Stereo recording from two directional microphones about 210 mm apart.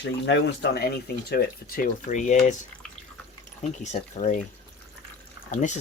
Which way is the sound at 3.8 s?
35° left (ahead or behind).